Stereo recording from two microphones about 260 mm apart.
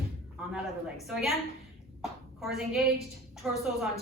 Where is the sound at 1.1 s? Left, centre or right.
Centre.